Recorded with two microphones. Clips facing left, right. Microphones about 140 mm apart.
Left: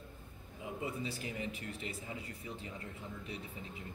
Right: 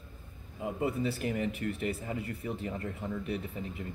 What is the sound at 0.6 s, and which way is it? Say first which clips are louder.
Speech: right 8 dB; 55° right (ahead or behind).